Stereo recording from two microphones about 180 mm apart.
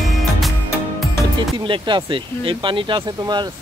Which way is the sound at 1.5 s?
25° right (ahead or behind).